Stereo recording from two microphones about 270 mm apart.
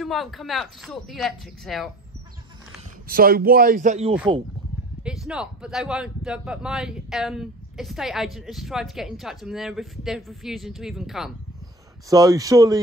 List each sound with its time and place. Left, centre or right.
0.0 s speech: centre
3.1 s a man's voice: right
5.0 s speech: centre
12.1 s speech: centre